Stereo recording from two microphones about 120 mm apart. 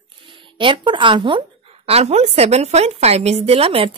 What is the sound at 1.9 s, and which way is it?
A woman's voice, 60° right (ahead or behind).